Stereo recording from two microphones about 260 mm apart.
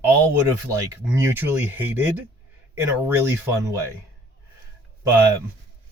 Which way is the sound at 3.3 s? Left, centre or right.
Centre.